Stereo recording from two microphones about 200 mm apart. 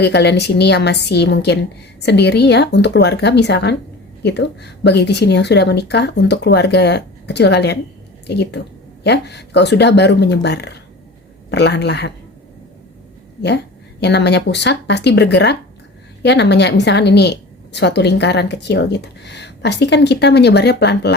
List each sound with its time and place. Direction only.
0.0 s a woman's voice: 55° left (ahead or behind)
14.0 s a woman's voice: 60° left (ahead or behind)